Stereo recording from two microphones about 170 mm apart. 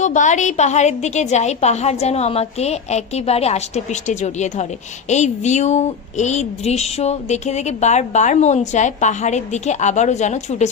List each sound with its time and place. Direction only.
0.0 s a woman's voice: 45° left (ahead or behind)